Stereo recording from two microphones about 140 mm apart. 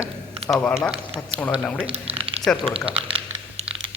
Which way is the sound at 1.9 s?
45° right (ahead or behind).